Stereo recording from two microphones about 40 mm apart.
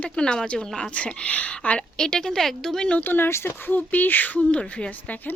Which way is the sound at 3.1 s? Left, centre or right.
Left.